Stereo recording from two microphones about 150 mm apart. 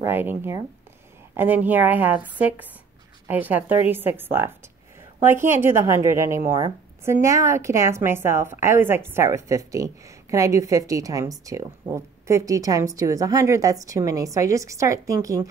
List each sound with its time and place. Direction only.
0.0 s a woman's voice: 15° right (ahead or behind)